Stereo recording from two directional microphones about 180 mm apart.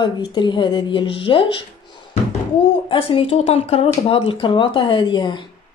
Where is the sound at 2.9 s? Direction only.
30° left (ahead or behind).